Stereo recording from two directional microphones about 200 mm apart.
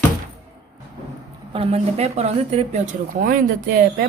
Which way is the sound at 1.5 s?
30° right (ahead or behind).